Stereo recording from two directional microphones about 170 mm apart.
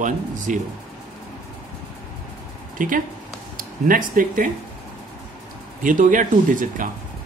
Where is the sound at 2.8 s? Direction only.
50° right (ahead or behind).